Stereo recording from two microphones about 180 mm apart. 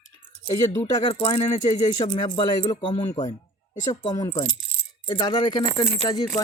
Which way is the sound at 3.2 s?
40° left (ahead or behind).